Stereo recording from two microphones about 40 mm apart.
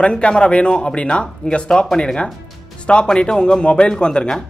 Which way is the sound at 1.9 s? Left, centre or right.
Centre.